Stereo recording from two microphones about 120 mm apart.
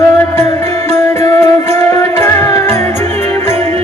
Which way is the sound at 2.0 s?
20° left (ahead or behind).